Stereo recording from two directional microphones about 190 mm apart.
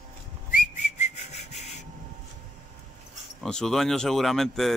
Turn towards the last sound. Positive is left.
turn(degrees=0)  # may be behind; listen again after turning